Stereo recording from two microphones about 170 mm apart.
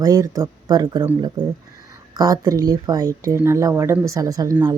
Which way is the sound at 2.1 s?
20° right (ahead or behind).